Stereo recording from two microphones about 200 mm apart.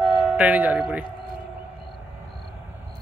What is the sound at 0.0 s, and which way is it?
Speech, 10° right (ahead or behind).